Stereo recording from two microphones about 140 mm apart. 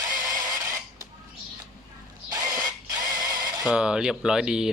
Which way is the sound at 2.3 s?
25° right (ahead or behind).